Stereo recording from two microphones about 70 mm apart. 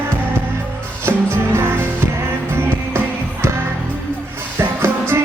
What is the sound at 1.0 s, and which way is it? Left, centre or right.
Music, right.